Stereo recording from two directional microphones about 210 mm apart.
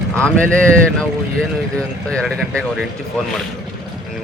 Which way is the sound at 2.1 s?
Centre (ahead or behind).